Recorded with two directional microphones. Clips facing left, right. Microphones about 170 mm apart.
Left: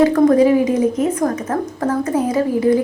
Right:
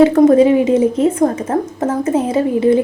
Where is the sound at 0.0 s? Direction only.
25° right (ahead or behind).